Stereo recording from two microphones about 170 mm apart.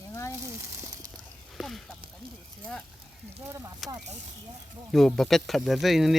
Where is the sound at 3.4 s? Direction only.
20° right (ahead or behind).